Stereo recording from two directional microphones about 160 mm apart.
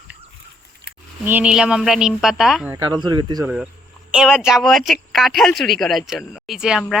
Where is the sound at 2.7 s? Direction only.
25° right (ahead or behind).